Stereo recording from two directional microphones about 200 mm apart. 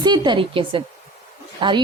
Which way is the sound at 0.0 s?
20° right (ahead or behind).